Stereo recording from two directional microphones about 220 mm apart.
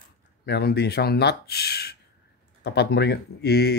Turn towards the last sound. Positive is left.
turn(degrees=45)  # may be behind; listen again after turning